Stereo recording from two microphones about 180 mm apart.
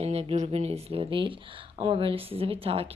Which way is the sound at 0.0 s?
35° right (ahead or behind).